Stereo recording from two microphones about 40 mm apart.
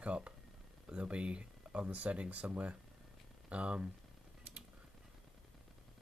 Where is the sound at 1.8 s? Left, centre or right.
Right.